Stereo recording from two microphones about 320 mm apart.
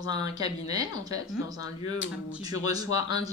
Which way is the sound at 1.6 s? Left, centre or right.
Left.